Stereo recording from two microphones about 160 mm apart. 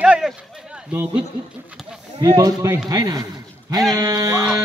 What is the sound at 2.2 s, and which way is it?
A man's voice, 25° right (ahead or behind).